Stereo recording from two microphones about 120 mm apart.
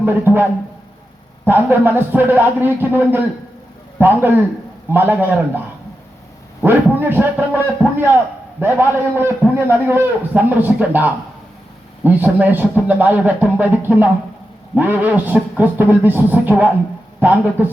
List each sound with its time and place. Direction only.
0.0 s speech: 15° right (ahead or behind)
1.5 s a man's voice: 15° right (ahead or behind)
6.7 s a man's voice: 15° right (ahead or behind)